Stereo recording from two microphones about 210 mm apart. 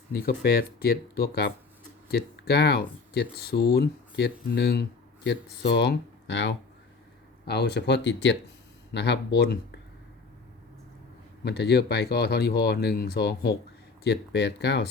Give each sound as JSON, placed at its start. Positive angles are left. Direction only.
{"t": 0.1, "sound": "speech", "side_deg": 45}
{"t": 11.4, "sound": "speech", "side_deg": 50}